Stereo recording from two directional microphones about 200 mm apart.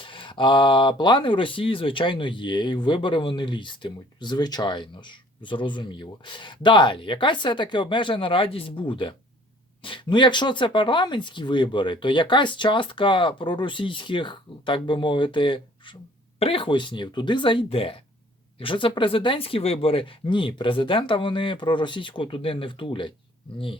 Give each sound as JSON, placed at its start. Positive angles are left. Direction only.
{"t": 0.0, "sound": "speech", "side_deg": 25}